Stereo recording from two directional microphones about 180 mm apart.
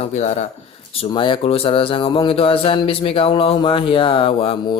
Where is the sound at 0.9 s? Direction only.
30° left (ahead or behind).